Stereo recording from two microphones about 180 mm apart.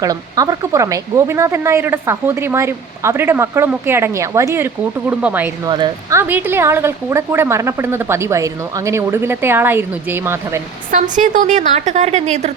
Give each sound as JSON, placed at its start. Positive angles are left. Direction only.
{"t": 0.0, "sound": "speech", "side_deg": -20}
{"t": 5.6, "sound": "speech", "side_deg": -25}
{"t": 10.9, "sound": "a woman's voice", "side_deg": -45}